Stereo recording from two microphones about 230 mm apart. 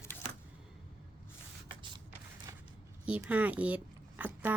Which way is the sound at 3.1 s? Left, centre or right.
Centre.